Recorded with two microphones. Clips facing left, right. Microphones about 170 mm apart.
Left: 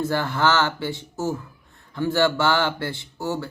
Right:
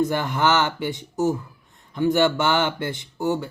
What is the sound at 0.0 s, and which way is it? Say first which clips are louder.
Speech: right 1 dB; 15° right (ahead or behind).